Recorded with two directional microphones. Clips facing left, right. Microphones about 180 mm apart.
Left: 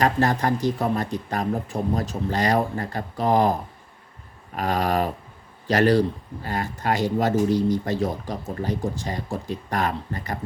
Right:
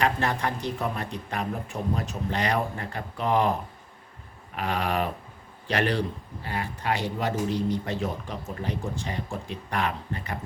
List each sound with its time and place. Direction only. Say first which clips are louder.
0.0 s speech: left 5 dB; 40° left (ahead or behind)